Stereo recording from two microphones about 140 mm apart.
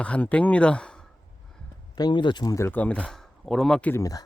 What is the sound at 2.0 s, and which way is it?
Speech, 30° left (ahead or behind).